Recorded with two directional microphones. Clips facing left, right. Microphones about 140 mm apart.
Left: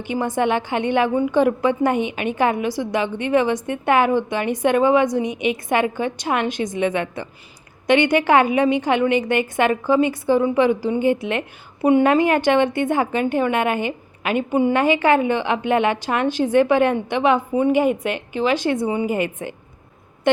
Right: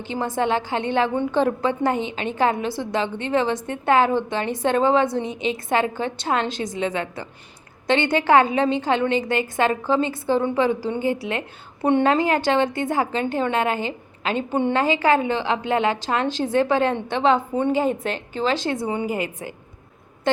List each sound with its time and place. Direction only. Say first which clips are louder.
0.0 s a woman's voice: left 3 dB; 15° left (ahead or behind)